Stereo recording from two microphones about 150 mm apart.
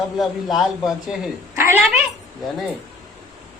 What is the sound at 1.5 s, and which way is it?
Speech, 15° right (ahead or behind).